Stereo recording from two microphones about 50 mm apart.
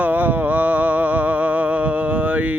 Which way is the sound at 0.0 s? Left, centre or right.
Right.